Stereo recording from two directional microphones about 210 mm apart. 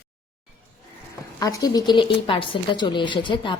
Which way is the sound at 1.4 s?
15° left (ahead or behind).